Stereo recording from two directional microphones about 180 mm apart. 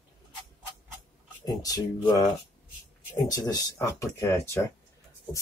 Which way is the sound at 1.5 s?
20° left (ahead or behind).